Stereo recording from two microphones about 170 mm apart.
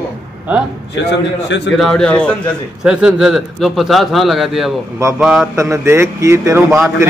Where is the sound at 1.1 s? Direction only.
90° left.